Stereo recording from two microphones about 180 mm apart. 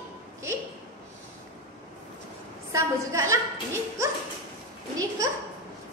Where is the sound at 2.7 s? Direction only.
15° right (ahead or behind).